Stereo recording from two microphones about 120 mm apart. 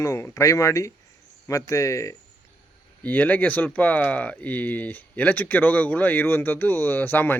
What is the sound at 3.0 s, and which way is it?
Speech, 15° left (ahead or behind).